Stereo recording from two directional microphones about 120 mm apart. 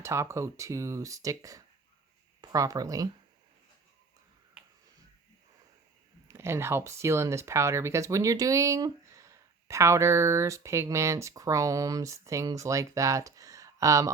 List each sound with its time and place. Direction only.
0.0 s speech: 25° right (ahead or behind)
4.6 s finger snapping: 5° right (ahead or behind)
6.2 s speech: 20° right (ahead or behind)